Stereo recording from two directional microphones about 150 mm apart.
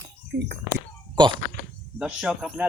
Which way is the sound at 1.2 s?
30° right (ahead or behind).